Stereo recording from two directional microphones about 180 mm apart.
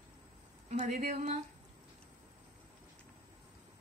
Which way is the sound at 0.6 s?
40° right (ahead or behind).